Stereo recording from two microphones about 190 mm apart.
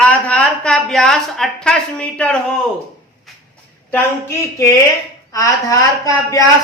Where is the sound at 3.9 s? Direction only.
15° left (ahead or behind).